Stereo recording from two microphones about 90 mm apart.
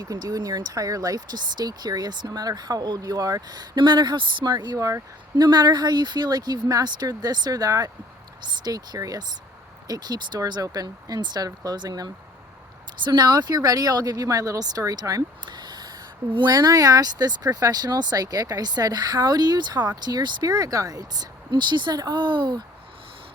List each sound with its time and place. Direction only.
0.0 s speech: 45° right (ahead or behind)
5.4 s speech: 50° right (ahead or behind)
15.4 s a sound: 50° right (ahead or behind)
16.5 s speech: 45° right (ahead or behind)